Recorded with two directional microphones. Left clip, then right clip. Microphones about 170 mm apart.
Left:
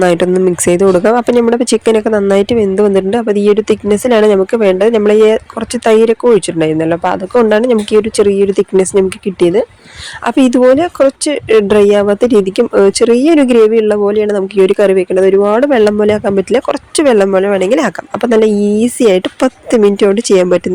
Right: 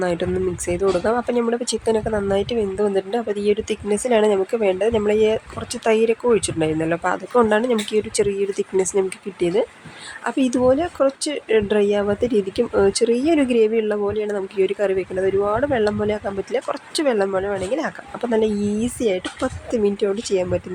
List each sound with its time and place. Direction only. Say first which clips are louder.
0.0 s speech: left 12 dB; 50° left (ahead or behind)